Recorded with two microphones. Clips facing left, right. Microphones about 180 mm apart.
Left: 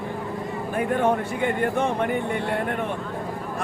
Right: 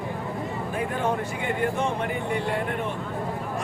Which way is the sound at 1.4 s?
55° left (ahead or behind).